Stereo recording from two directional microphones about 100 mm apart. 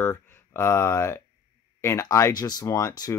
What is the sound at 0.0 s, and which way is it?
Speech, 20° left (ahead or behind).